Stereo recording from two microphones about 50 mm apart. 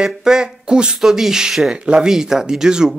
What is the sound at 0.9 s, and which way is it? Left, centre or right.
Speech, centre.